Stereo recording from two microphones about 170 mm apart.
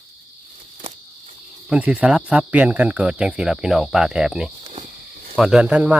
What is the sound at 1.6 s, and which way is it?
Speech, 5° right (ahead or behind).